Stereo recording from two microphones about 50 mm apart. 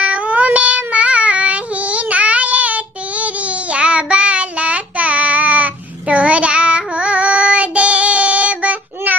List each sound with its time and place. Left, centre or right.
0.0 s child singing: right